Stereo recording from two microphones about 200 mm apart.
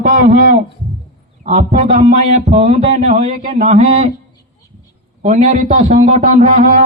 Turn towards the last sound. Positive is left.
turn(degrees=-35)  # may be behind; listen again after turning